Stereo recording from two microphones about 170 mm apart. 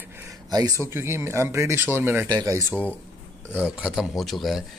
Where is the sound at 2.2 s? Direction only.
25° right (ahead or behind).